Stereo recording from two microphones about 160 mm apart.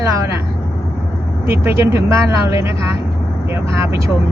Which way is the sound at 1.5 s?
15° right (ahead or behind).